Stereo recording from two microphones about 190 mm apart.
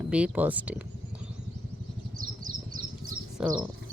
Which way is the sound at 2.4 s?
45° right (ahead or behind).